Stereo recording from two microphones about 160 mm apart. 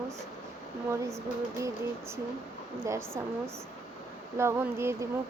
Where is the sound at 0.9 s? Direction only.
15° right (ahead or behind).